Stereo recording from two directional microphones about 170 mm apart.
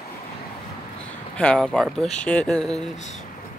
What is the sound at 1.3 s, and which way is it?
Speech, 5° left (ahead or behind).